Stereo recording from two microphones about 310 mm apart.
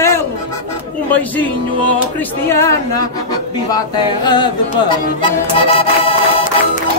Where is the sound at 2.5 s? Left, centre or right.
Centre.